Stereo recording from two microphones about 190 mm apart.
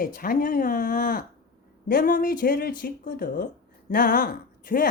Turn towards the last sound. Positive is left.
turn(degrees=50)  # may be behind; listen again after turning